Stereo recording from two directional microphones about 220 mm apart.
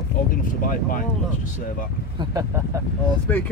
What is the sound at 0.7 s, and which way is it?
Speech, 40° left (ahead or behind).